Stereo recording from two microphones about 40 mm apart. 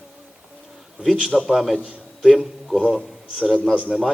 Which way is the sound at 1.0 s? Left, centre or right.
Centre.